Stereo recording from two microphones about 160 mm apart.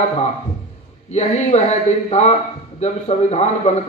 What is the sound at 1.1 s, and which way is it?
Speech, 45° left (ahead or behind).